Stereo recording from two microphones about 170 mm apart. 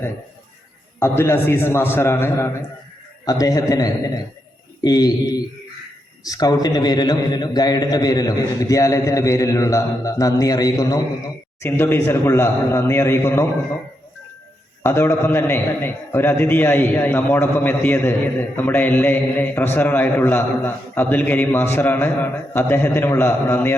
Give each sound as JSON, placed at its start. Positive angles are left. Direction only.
{"t": 0.9, "sound": "a man's voice", "side_deg": 15}
{"t": 14.8, "sound": "a man's voice", "side_deg": 15}